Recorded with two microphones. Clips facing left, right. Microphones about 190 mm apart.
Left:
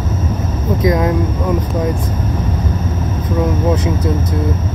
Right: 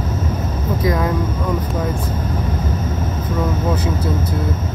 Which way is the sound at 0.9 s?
20° left (ahead or behind).